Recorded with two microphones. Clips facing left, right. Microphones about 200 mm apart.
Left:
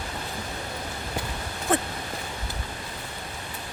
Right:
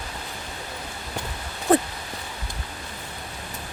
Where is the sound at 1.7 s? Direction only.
35° right (ahead or behind).